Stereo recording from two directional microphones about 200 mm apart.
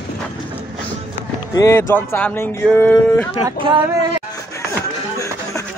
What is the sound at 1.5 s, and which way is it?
Speech, 15° left (ahead or behind).